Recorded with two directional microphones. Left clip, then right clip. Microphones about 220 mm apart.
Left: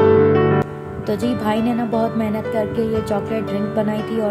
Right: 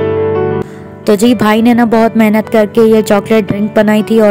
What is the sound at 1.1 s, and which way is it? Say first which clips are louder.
A woman's voice: right 12 dB; 40° right (ahead or behind).